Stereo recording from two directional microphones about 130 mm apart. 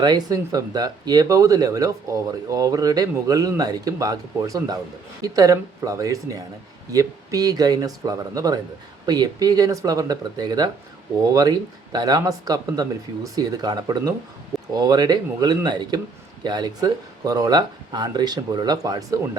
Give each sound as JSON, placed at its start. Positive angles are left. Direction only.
{"t": 0.0, "sound": "speech", "side_deg": -30}